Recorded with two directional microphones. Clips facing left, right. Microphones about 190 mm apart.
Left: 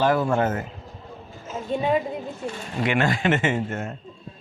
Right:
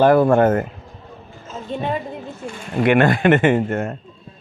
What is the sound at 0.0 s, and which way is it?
Speech, 55° right (ahead or behind).